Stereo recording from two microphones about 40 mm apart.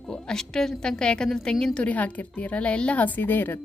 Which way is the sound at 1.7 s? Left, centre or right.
Left.